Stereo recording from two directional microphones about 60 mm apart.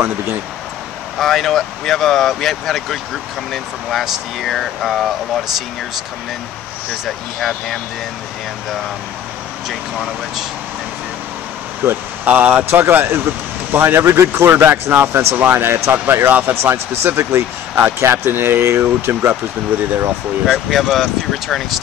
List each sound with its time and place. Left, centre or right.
1.1 s speech: centre
7.1 s speech: centre
11.8 s speech: right
16.7 s speech: right
20.4 s speech: centre